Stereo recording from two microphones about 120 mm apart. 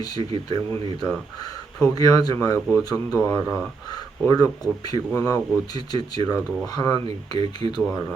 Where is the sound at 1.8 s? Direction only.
30° left (ahead or behind).